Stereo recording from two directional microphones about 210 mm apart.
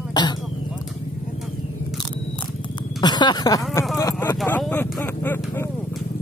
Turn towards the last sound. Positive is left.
turn(degrees=10)  # may be behind; listen again after turning